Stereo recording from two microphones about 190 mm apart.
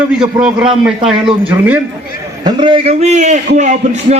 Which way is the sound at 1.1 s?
25° right (ahead or behind).